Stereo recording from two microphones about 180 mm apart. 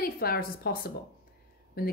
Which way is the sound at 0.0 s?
60° left (ahead or behind).